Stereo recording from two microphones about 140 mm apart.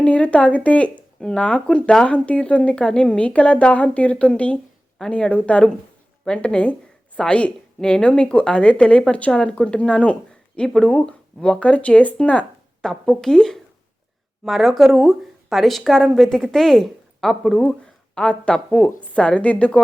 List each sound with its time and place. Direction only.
0.0 s speech: 10° left (ahead or behind)